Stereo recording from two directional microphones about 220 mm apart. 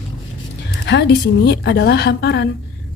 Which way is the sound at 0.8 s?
50° left (ahead or behind).